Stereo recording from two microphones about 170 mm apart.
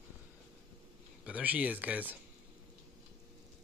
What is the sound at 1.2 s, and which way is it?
Speech, 10° right (ahead or behind).